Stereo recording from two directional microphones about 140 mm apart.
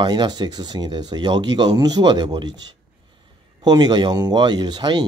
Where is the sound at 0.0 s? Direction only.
30° right (ahead or behind).